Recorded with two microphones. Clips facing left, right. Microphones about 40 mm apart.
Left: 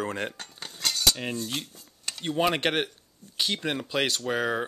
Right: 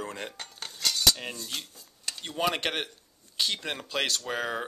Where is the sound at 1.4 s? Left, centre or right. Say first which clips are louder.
Left 5 dB; left.